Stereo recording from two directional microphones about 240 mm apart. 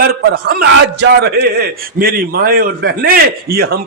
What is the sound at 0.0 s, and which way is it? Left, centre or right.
A man's voice, right.